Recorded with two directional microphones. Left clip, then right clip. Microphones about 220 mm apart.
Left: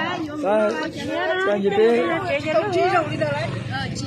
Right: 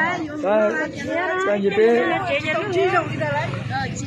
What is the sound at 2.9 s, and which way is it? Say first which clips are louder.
Speech: even; 50° left (ahead or behind).